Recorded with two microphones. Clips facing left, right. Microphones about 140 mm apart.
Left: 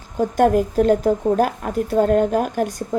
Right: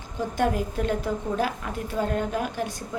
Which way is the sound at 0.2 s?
50° left (ahead or behind).